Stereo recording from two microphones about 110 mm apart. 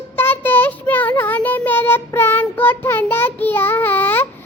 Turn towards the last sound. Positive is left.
turn(degrees=15)  # may be behind; listen again after turning